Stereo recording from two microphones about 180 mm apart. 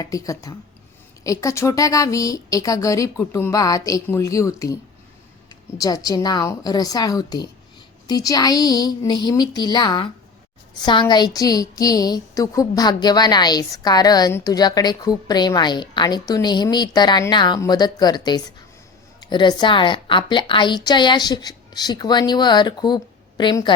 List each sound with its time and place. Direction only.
0.0 s a woman's voice: 20° left (ahead or behind)